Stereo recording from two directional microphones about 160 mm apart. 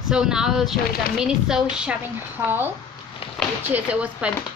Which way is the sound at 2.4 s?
15° right (ahead or behind).